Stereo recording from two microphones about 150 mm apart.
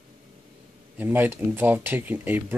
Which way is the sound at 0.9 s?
10° right (ahead or behind).